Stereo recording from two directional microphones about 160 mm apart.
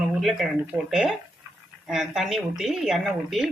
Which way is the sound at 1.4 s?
20° right (ahead or behind).